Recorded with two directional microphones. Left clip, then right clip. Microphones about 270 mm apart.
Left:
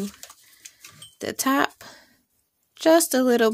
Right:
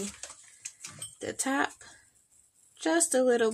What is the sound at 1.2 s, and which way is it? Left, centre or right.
Speech, left.